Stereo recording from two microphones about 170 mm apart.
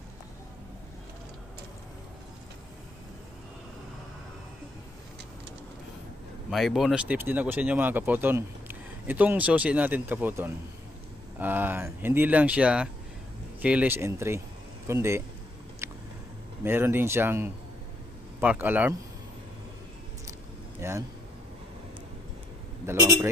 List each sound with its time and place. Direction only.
6.5 s speech: centre (ahead or behind)
15.8 s a sound: 15° right (ahead or behind)
16.6 s speech: 15° right (ahead or behind)
20.8 s speech: 15° right (ahead or behind)
22.8 s speech: 15° right (ahead or behind)